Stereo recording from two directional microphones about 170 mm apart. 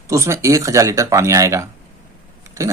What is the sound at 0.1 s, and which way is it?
Speech, 15° right (ahead or behind).